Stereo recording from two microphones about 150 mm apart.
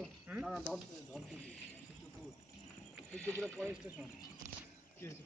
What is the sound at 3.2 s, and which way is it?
Speech, 5° left (ahead or behind).